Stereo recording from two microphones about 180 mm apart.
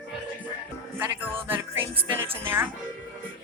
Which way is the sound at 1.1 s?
10° right (ahead or behind).